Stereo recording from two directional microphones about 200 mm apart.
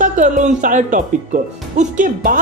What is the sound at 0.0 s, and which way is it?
A woman's voice, 40° right (ahead or behind).